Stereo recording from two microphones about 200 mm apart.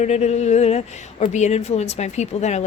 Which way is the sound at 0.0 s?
35° left (ahead or behind).